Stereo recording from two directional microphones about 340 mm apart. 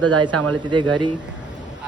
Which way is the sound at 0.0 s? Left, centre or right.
Right.